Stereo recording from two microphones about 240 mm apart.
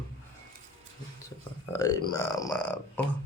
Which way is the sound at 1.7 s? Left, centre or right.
Centre.